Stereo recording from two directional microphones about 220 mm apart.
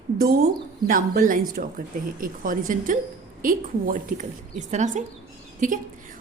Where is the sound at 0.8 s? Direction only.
40° right (ahead or behind).